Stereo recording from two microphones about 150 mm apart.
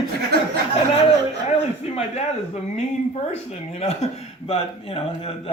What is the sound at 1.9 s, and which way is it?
A man's voice, 45° left (ahead or behind).